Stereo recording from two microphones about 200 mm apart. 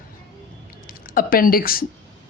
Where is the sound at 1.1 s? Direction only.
45° left (ahead or behind).